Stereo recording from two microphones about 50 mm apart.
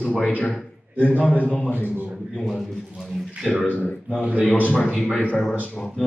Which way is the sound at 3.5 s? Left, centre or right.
Left.